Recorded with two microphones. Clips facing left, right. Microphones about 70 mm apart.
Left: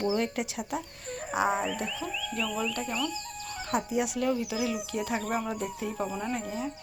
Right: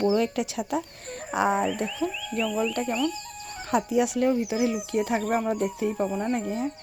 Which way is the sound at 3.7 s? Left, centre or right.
Right.